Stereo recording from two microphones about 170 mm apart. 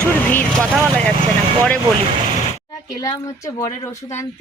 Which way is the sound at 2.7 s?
20° left (ahead or behind).